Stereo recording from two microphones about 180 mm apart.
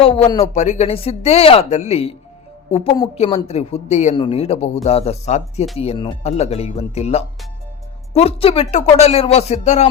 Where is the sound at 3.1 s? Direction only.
35° left (ahead or behind).